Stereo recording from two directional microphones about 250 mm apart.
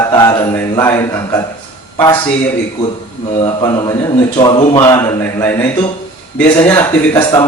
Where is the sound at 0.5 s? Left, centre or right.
Centre.